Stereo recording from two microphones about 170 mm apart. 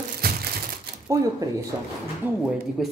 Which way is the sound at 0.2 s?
60° right (ahead or behind).